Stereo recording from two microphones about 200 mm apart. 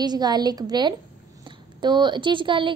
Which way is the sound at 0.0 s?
20° right (ahead or behind).